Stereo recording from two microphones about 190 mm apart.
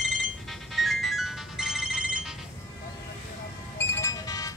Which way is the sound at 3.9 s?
15° left (ahead or behind).